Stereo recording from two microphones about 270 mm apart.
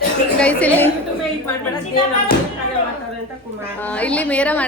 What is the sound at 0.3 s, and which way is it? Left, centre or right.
Speech, centre.